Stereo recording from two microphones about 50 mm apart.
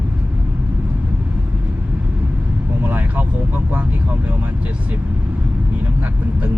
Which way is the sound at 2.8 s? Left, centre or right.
Right.